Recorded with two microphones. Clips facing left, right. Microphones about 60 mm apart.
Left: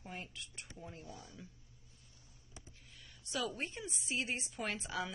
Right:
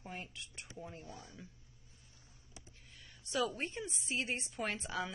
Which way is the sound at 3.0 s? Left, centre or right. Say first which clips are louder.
Right 4 dB; centre.